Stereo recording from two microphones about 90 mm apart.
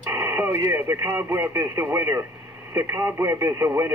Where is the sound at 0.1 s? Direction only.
30° right (ahead or behind).